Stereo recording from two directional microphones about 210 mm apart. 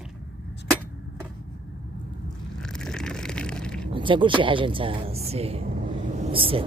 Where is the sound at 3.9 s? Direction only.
25° right (ahead or behind).